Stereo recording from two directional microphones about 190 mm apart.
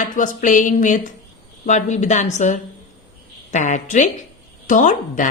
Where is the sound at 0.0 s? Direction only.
40° left (ahead or behind).